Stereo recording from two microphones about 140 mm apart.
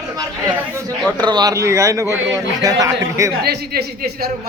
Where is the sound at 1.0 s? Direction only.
10° left (ahead or behind).